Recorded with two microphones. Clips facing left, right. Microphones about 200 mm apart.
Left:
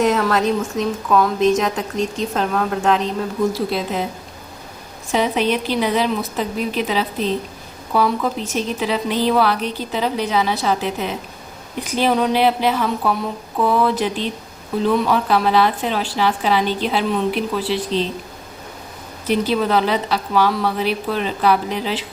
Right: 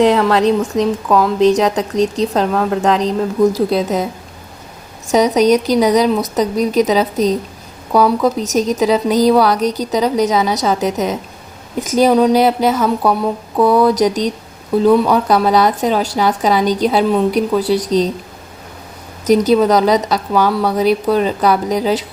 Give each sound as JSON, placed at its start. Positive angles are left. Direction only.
{"t": 0.3, "sound": "a woman's voice", "side_deg": -30}
{"t": 5.0, "sound": "a woman's voice", "side_deg": -40}
{"t": 19.2, "sound": "a woman's voice", "side_deg": -40}